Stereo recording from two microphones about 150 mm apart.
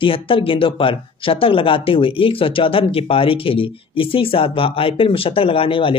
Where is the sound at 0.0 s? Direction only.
35° left (ahead or behind).